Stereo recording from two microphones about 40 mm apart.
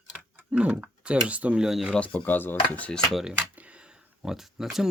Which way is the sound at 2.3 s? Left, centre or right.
Left.